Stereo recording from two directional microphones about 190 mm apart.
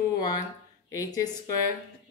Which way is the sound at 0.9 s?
20° left (ahead or behind).